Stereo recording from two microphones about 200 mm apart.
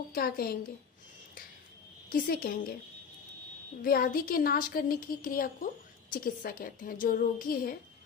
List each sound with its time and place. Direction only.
0.1 s a child's voice: 50° left (ahead or behind)
2.0 s a child's voice: 45° left (ahead or behind)
3.8 s a child's voice: 45° left (ahead or behind)